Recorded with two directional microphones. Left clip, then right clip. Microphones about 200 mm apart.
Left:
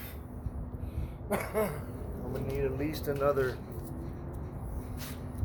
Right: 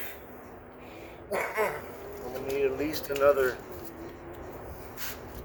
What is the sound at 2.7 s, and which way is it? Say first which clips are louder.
Speech: right 4 dB; 15° right (ahead or behind).